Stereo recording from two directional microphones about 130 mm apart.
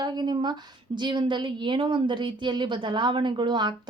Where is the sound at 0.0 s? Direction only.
35° right (ahead or behind).